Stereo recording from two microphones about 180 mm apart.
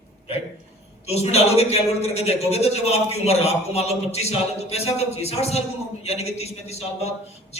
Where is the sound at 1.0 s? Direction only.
35° left (ahead or behind).